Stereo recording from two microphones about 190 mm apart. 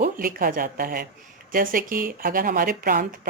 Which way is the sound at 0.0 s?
50° right (ahead or behind).